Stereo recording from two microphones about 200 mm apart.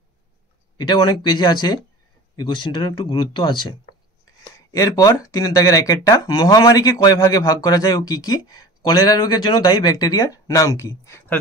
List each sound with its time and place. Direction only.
0.7 s speech: 20° left (ahead or behind)
4.6 s speech: 15° left (ahead or behind)